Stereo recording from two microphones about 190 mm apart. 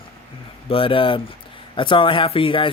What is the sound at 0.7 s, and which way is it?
Speech, 30° left (ahead or behind).